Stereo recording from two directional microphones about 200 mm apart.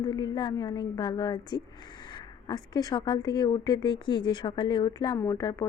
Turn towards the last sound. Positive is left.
turn(degrees=15)  # may be behind; listen again after turning